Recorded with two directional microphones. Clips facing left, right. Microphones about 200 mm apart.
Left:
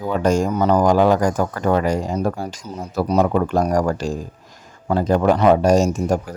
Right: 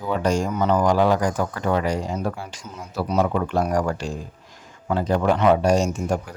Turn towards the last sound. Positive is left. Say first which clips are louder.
# left 5 dB
turn(degrees=40)  # may be behind; listen again after turning